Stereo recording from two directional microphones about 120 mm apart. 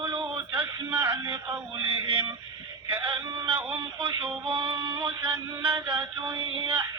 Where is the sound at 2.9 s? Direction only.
35° right (ahead or behind).